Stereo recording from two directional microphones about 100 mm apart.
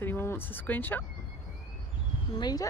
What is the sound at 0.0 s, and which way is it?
Speech, 20° left (ahead or behind).